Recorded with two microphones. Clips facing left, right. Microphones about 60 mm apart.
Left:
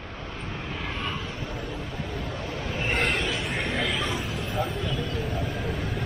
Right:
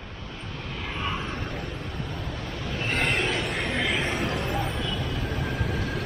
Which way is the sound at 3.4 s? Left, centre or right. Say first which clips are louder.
Even; centre.